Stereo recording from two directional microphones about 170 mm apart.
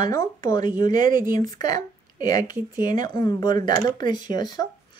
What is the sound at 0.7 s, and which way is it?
Speech, 50° right (ahead or behind).